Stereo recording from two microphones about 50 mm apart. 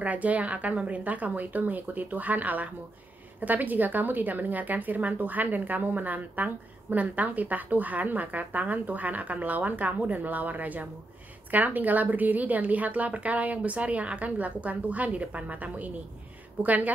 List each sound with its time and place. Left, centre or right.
0.0 s a woman's voice: right